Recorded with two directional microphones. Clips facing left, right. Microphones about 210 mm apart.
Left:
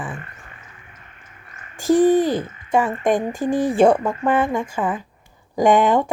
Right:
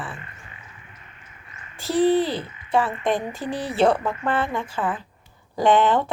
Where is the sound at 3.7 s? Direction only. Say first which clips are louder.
Left 2 dB; 15° left (ahead or behind).